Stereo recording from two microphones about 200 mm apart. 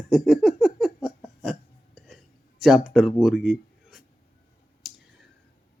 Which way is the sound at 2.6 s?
Centre (ahead or behind).